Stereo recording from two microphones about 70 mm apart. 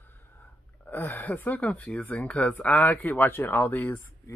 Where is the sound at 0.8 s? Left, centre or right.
Left.